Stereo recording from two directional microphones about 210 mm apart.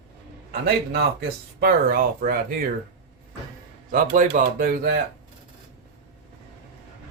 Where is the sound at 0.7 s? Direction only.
50° right (ahead or behind).